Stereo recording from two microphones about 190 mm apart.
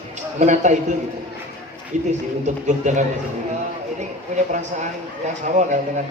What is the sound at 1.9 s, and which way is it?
A man's voice, 40° right (ahead or behind).